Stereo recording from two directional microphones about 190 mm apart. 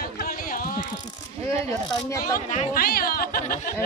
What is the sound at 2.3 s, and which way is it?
Speech, 45° left (ahead or behind).